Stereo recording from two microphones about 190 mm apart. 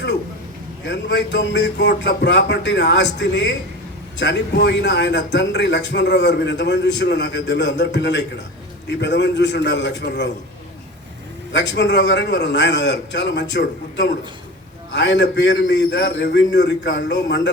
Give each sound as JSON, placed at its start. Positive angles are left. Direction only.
{"t": 0.9, "sound": "a man's voice", "side_deg": 70}
{"t": 11.5, "sound": "a man's voice", "side_deg": 65}